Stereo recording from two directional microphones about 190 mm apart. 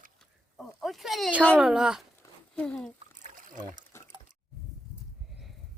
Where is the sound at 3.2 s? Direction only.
45° right (ahead or behind).